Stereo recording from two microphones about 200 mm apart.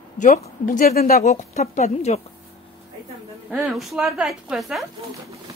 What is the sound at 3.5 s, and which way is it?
A woman's voice, centre (ahead or behind).